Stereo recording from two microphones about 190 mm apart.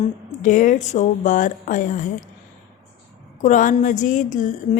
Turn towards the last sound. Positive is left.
turn(degrees=40)  # may be behind; listen again after turning